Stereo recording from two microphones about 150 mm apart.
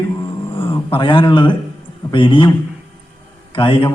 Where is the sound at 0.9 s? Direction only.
35° left (ahead or behind).